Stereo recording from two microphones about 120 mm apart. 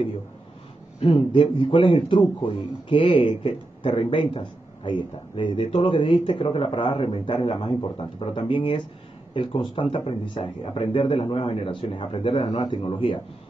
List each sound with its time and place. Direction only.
0.9 s a man's voice: 50° left (ahead or behind)